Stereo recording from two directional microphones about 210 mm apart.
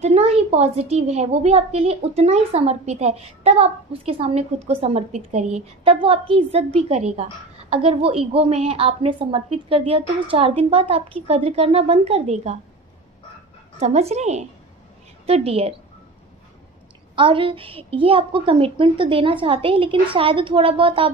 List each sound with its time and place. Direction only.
0.0 s a woman's voice: 30° right (ahead or behind)
13.7 s a woman's voice: 30° right (ahead or behind)
17.1 s a woman's voice: 25° right (ahead or behind)